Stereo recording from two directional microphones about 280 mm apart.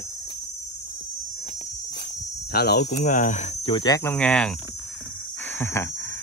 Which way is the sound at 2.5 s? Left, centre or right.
Left.